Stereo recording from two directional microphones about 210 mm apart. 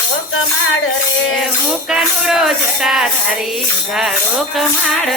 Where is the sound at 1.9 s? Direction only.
Centre (ahead or behind).